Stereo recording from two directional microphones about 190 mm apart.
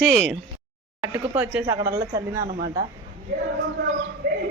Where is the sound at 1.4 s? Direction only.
10° right (ahead or behind).